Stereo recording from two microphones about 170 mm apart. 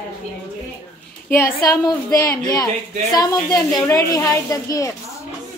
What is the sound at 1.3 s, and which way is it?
A woman's voice, 15° left (ahead or behind).